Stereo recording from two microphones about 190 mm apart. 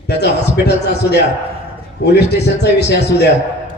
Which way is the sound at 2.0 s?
60° left (ahead or behind).